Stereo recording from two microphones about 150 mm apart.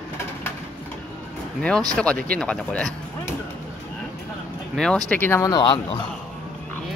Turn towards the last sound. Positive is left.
turn(degrees=30)  # may be behind; listen again after turning